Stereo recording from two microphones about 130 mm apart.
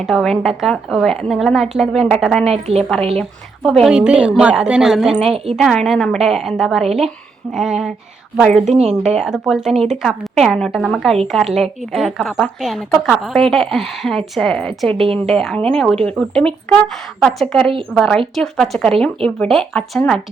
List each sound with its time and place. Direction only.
0.0 s a woman's voice: centre (ahead or behind)
8.6 s a woman's voice: 60° right (ahead or behind)
9.0 s a woman's voice: 5° right (ahead or behind)
14.9 s a woman's voice: 50° right (ahead or behind)
15.3 s a woman's voice: centre (ahead or behind)